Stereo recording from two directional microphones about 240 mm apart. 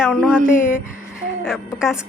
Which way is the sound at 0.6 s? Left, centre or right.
Left.